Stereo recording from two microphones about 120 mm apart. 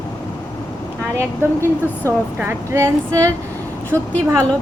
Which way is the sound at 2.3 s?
20° right (ahead or behind).